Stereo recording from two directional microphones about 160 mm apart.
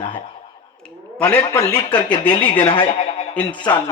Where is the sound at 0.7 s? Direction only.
5° left (ahead or behind).